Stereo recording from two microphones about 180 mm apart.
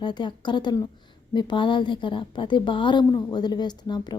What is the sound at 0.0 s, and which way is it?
A woman's voice, 25° left (ahead or behind).